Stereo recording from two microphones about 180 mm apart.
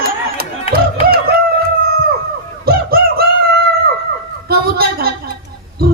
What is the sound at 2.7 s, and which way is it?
Fowl, 55° right (ahead or behind).